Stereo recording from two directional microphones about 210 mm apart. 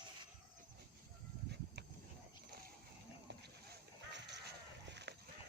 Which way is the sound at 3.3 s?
55° right (ahead or behind).